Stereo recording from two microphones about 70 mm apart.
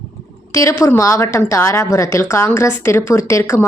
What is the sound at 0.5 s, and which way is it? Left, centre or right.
A woman's voice, left.